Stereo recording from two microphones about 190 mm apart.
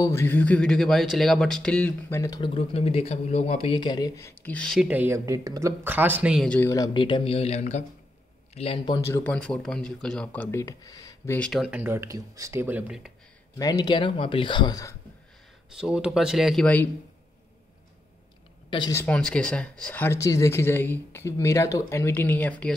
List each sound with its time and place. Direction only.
0.0 s speech: 15° left (ahead or behind)
6.7 s speech: 20° left (ahead or behind)
11.3 s speech: centre (ahead or behind)
13.6 s speech: 20° left (ahead or behind)
15.7 s speech: 5° right (ahead or behind)
18.7 s a woman's voice: 25° left (ahead or behind)
18.9 s speech: 5° left (ahead or behind)